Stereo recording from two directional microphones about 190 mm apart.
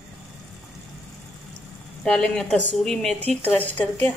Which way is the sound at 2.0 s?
5° left (ahead or behind).